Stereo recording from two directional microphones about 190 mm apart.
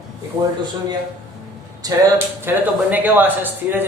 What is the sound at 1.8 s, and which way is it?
Speech, 20° right (ahead or behind).